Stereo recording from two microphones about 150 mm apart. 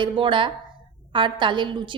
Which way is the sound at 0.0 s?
35° right (ahead or behind).